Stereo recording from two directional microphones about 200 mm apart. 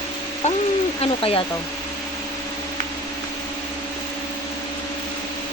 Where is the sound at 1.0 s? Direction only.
30° left (ahead or behind).